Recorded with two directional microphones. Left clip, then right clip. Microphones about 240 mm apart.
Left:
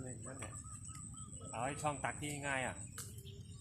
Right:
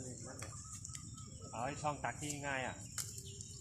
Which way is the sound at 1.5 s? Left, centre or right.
Left.